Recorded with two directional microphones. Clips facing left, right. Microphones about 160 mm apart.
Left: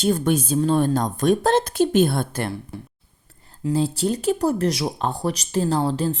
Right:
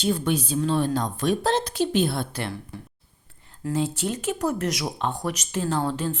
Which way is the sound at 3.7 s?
35° left (ahead or behind).